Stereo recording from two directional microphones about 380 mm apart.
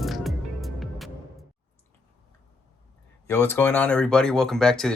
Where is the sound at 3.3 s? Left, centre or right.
Centre.